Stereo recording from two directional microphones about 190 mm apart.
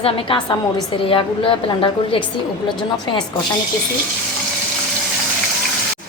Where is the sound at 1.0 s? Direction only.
25° left (ahead or behind).